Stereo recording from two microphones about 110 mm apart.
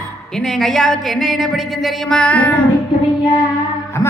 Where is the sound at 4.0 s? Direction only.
25° left (ahead or behind).